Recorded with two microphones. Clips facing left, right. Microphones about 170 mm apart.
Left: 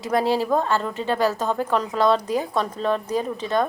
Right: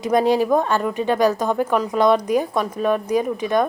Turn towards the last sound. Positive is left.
turn(degrees=-15)  # may be behind; listen again after turning